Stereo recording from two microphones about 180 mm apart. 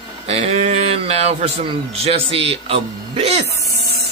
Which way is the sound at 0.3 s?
35° right (ahead or behind).